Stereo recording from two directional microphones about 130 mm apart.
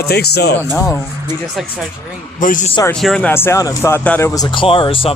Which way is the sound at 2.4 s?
90° left.